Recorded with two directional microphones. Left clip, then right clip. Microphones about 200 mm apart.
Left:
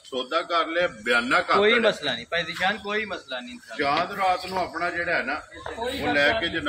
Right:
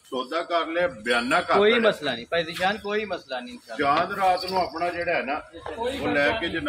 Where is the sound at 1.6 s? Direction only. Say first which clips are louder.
Right 2 dB; 30° right (ahead or behind).